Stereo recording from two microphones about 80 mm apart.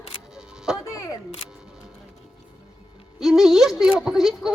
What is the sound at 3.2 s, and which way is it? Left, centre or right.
Speech, centre.